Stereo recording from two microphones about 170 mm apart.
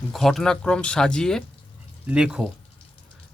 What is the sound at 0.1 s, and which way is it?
A man's voice, centre (ahead or behind).